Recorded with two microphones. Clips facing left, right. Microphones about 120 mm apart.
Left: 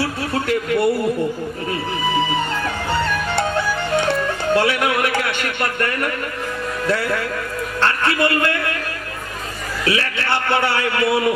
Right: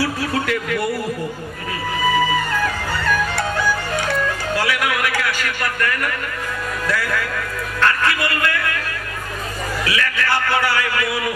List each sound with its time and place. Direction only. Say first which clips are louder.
0.0 s a sound: right 1 dB; 30° left (ahead or behind)
2.1 s music: right 1 dB; 25° left (ahead or behind)
6.8 s a man's voice: left 3 dB; 25° left (ahead or behind)
9.8 s a man's voice: left 2 dB; 30° left (ahead or behind)